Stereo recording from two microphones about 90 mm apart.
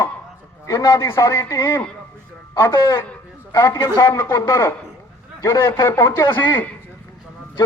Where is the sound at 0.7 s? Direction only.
35° left (ahead or behind).